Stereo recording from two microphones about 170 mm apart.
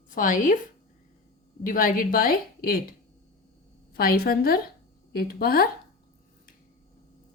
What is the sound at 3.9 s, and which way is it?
Speech, 60° left (ahead or behind).